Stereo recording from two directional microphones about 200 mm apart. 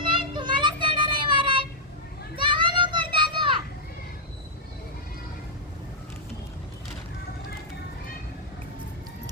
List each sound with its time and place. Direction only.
0.0 s child singing: 25° right (ahead or behind)
2.3 s children playing: 25° right (ahead or behind)